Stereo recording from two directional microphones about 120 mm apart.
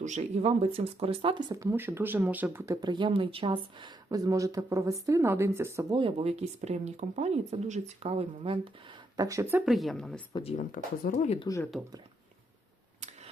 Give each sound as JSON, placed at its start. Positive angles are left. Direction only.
{"t": 0.0, "sound": "speech", "side_deg": -75}
{"t": 2.8, "sound": "speech", "side_deg": -40}
{"t": 5.9, "sound": "speech", "side_deg": -45}
{"t": 9.1, "sound": "speech", "side_deg": -30}
{"t": 9.6, "sound": "a woman's voice", "side_deg": 0}
{"t": 10.6, "sound": "speech", "side_deg": 90}